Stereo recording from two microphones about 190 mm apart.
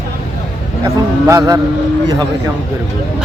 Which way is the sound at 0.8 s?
15° right (ahead or behind).